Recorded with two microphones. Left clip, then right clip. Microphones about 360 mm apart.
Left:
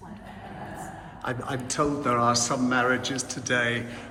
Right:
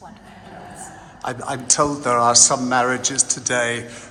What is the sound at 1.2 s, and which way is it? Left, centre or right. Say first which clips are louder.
A man's voice: right 5 dB; centre.